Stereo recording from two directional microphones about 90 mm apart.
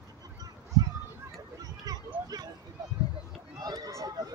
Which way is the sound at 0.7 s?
45° right (ahead or behind).